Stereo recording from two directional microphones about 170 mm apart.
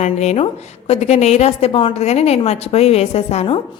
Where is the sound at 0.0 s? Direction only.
40° left (ahead or behind).